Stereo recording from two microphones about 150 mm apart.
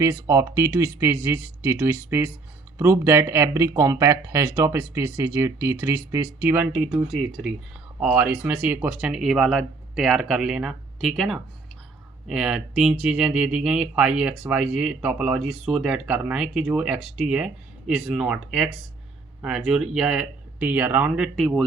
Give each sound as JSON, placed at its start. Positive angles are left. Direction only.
{"t": 0.0, "sound": "speech", "side_deg": -20}
{"t": 7.1, "sound": "speech", "side_deg": 0}
{"t": 7.9, "sound": "speech", "side_deg": -10}
{"t": 21.3, "sound": "speech", "side_deg": 0}